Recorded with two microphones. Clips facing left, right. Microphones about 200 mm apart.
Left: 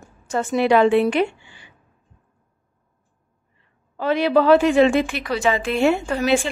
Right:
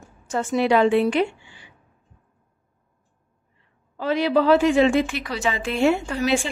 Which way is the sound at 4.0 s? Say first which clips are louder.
Left 2 dB; 60° left (ahead or behind).